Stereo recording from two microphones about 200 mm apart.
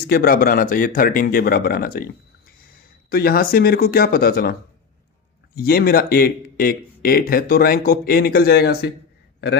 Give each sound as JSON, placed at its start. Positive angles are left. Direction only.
{"t": 0.1, "sound": "speech", "side_deg": 50}
{"t": 5.5, "sound": "speech", "side_deg": 50}